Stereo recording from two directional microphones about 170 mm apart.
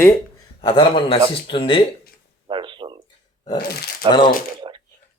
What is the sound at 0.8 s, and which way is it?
Speech, 30° left (ahead or behind).